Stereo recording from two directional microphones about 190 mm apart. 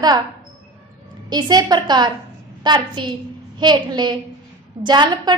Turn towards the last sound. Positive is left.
turn(degrees=-25)  # may be behind; listen again after turning